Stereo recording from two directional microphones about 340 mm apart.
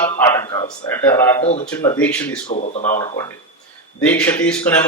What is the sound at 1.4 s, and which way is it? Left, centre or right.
Speech, centre.